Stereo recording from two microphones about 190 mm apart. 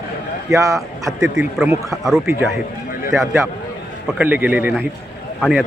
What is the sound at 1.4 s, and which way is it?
Speech, 5° right (ahead or behind).